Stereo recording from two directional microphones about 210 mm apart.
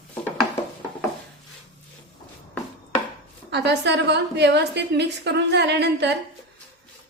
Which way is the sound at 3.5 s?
55° right (ahead or behind).